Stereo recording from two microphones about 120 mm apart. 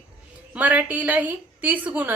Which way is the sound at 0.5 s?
10° right (ahead or behind).